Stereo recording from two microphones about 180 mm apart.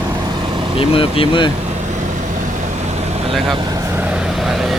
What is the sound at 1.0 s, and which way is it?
Speech, 30° left (ahead or behind).